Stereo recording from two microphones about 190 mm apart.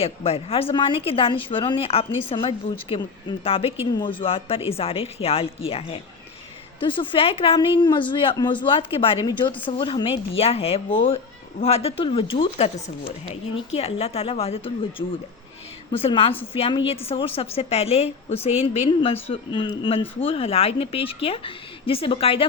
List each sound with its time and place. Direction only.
0.0 s a woman's voice: 30° left (ahead or behind)
13.7 s a woman's voice: 35° left (ahead or behind)